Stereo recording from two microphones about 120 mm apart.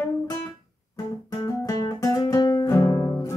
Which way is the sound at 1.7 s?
35° left (ahead or behind).